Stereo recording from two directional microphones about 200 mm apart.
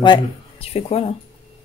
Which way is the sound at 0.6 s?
30° left (ahead or behind).